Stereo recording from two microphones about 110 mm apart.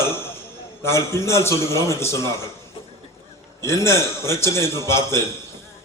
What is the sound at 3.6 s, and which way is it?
A man's voice, 25° left (ahead or behind).